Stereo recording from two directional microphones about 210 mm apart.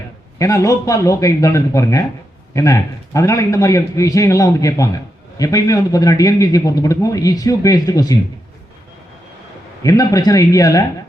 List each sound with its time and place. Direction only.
0.3 s a man's voice: 15° left (ahead or behind)
9.8 s a man's voice: 15° left (ahead or behind)